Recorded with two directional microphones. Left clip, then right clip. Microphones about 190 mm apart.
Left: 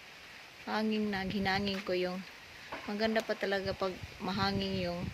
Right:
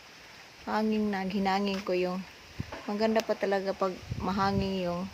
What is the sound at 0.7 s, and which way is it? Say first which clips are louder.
Speech: right 4 dB; 20° right (ahead or behind).